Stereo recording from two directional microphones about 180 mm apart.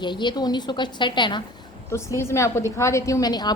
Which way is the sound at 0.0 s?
25° left (ahead or behind).